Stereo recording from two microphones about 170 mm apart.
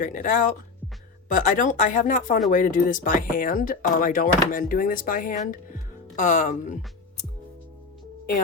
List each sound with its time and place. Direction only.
0.0 s speech: 50° left (ahead or behind)